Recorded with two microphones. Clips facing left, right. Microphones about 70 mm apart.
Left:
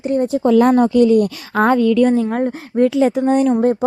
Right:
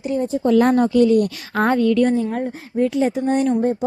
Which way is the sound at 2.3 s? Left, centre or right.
Left.